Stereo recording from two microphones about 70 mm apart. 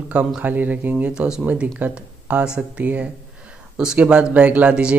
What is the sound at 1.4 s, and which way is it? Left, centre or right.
Speech, right.